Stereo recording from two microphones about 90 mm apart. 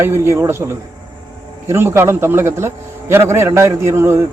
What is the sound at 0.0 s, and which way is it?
A man's voice, 30° right (ahead or behind).